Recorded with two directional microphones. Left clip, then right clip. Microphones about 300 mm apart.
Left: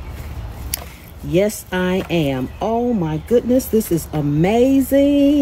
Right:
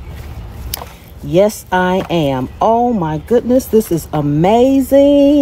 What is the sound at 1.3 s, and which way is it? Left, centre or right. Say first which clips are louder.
Speech: right 6 dB; centre.